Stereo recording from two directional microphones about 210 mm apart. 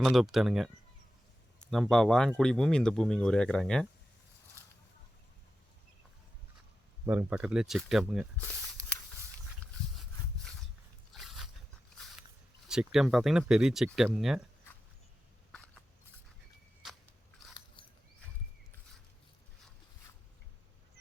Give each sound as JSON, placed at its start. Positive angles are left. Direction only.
{"t": 0.0, "sound": "speech", "side_deg": 0}
{"t": 1.7, "sound": "speech", "side_deg": 0}
{"t": 7.0, "sound": "speech", "side_deg": -10}
{"t": 10.4, "sound": "a sound", "side_deg": 0}
{"t": 11.1, "sound": "biting", "side_deg": 0}
{"t": 12.6, "sound": "speech", "side_deg": -5}
{"t": 16.8, "sound": "a sound", "side_deg": 0}